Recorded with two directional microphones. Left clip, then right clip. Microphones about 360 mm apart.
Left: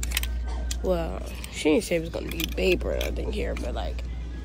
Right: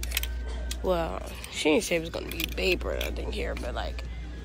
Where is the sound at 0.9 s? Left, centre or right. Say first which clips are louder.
Even; centre.